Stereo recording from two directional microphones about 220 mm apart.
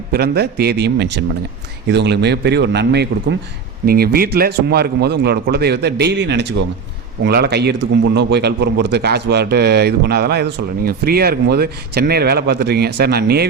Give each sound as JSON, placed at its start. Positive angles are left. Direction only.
{"t": 0.1, "sound": "a man's voice", "side_deg": -45}